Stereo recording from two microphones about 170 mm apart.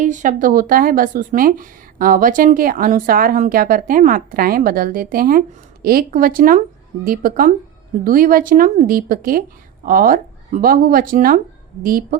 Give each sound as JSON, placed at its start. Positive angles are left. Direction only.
{"t": 0.0, "sound": "speech", "side_deg": -50}